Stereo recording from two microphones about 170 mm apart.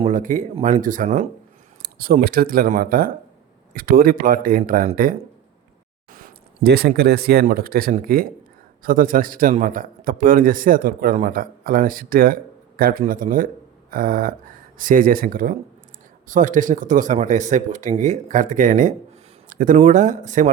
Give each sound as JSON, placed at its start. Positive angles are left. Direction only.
{"t": 0.0, "sound": "speech", "side_deg": -50}
{"t": 1.8, "sound": "a man's voice", "side_deg": -60}
{"t": 6.1, "sound": "a man's voice", "side_deg": -55}
{"t": 19.5, "sound": "a sound", "side_deg": -50}
{"t": 19.7, "sound": "speech", "side_deg": -45}